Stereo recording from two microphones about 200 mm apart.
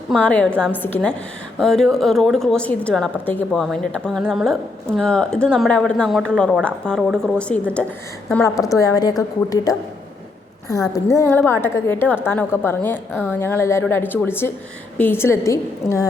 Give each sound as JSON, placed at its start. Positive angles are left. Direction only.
{"t": 0.1, "sound": "a woman's voice", "side_deg": 5}